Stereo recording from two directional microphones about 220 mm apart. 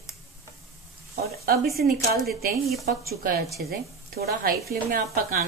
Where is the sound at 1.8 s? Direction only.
45° right (ahead or behind).